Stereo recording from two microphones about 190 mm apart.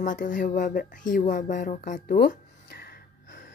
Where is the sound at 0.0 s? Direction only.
45° left (ahead or behind).